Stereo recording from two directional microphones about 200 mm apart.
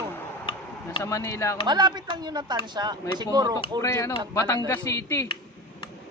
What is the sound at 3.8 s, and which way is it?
Speech, 15° left (ahead or behind).